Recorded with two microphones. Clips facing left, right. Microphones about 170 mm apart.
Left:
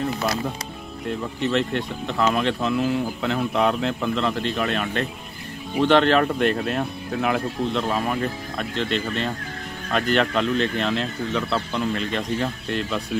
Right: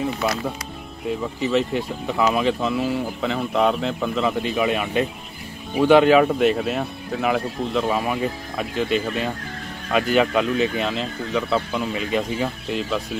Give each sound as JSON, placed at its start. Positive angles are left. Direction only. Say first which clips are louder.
{"t": 1.0, "sound": "speech", "louder": "right 1 dB", "side_deg": 0}